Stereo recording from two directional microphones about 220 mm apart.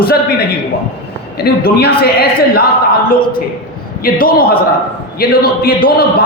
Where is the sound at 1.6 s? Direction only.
45° left (ahead or behind).